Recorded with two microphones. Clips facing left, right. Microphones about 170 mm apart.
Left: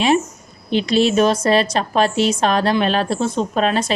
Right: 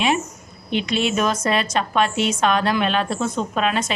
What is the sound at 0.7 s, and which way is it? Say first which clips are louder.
A woman's voice: left 6 dB; 35° left (ahead or behind).